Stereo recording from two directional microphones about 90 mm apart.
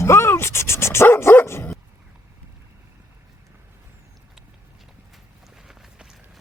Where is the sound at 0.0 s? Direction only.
30° left (ahead or behind).